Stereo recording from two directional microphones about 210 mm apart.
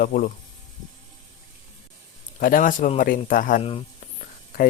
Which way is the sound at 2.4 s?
40° left (ahead or behind).